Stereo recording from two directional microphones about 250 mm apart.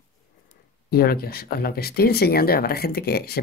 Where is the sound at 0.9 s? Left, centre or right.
Left.